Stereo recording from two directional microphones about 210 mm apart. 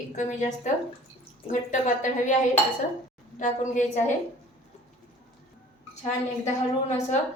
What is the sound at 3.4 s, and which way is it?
Speech, 35° left (ahead or behind).